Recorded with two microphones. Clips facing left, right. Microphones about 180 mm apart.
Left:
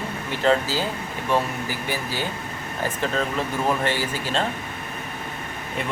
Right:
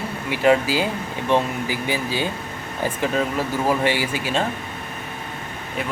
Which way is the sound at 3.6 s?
10° right (ahead or behind).